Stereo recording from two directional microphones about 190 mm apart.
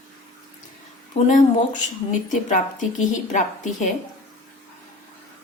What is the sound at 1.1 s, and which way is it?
A woman's voice, 35° left (ahead or behind).